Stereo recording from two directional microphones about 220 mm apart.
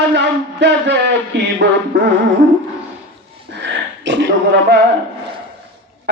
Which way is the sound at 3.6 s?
55° right (ahead or behind).